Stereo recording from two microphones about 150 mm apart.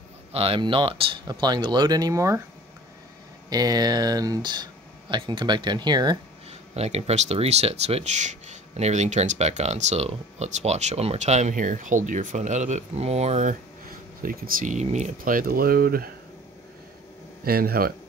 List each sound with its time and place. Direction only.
0.3 s speech: 40° right (ahead or behind); by 2.4 s 20° right (ahead or behind)
3.4 s speech: 25° right (ahead or behind)
6.7 s speech: 45° right (ahead or behind); by 16.1 s 80° right
17.5 s speech: 85° right